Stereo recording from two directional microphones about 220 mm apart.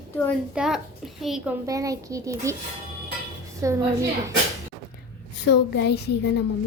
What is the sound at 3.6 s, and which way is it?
Speech, 15° right (ahead or behind).